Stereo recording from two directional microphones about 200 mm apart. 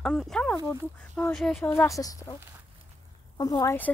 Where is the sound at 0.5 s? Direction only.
15° left (ahead or behind).